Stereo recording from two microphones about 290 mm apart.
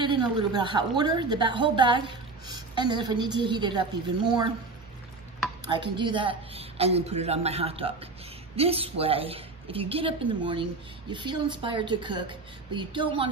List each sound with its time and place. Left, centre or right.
0.0 s a woman's voice: centre
5.7 s a woman's voice: centre